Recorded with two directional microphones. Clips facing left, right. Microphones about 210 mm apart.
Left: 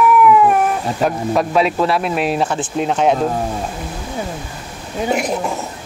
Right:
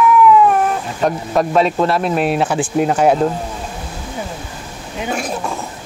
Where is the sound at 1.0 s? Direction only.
Centre (ahead or behind).